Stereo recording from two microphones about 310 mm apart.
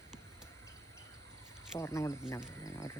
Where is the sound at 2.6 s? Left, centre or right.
Centre.